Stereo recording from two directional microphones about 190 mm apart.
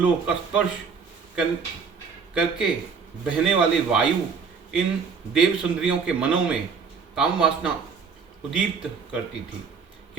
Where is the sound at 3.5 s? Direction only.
5° right (ahead or behind).